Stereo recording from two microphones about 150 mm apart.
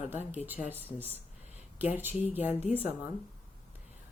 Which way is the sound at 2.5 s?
45° left (ahead or behind).